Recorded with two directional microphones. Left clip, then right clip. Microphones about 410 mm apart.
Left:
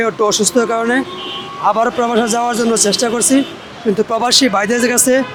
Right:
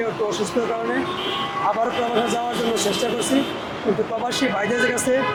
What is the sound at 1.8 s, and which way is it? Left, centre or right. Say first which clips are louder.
Speech: left 7 dB; left.